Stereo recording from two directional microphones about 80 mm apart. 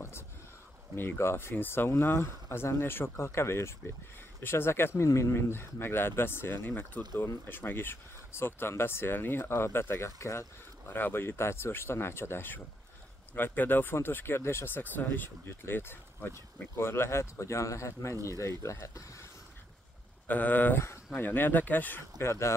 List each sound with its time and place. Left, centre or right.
0.9 s speech: left
10.9 s speech: left
20.2 s speech: left